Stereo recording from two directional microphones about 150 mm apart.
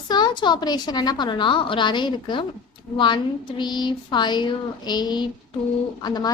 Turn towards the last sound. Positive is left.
turn(degrees=30)  # may be behind; listen again after turning